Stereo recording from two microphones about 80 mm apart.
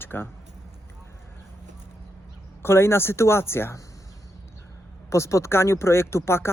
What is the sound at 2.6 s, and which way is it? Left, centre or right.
Speech, left.